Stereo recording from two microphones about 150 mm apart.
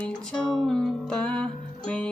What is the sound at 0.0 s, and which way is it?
Music, 5° left (ahead or behind).